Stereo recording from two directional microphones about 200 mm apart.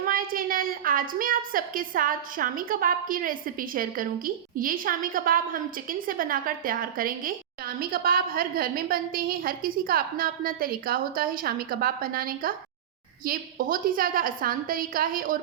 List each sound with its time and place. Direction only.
0.0 s a woman's voice: 45° right (ahead or behind)